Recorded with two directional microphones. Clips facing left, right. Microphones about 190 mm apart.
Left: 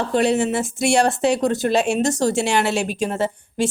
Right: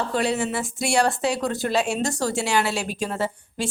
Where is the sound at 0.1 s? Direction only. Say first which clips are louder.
Left 5 dB; 25° left (ahead or behind).